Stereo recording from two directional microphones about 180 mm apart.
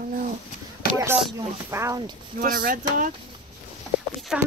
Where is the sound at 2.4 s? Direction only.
50° right (ahead or behind).